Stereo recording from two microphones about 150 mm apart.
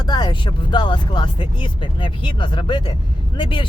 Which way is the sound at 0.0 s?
30° left (ahead or behind).